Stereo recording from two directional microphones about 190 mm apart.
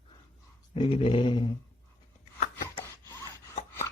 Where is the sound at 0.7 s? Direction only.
25° left (ahead or behind).